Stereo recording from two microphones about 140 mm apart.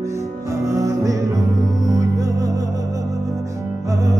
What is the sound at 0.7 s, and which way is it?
Music, 25° right (ahead or behind).